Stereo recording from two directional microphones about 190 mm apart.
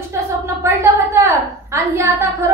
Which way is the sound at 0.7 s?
15° right (ahead or behind).